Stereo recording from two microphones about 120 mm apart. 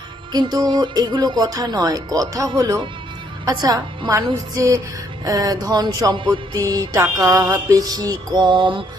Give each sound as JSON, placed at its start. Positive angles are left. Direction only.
{"t": 0.3, "sound": "speech", "side_deg": -35}
{"t": 4.5, "sound": "music", "side_deg": -25}
{"t": 5.2, "sound": "speech", "side_deg": -30}
{"t": 6.1, "sound": "music", "side_deg": -45}
{"t": 6.5, "sound": "speech", "side_deg": -30}